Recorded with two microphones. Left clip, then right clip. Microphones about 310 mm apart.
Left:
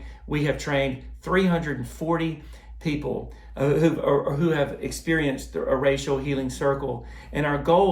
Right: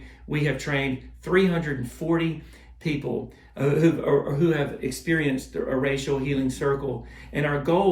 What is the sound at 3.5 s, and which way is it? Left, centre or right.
Speech, centre.